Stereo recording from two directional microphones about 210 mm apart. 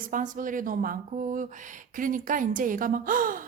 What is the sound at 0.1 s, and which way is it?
Speech, 40° right (ahead or behind).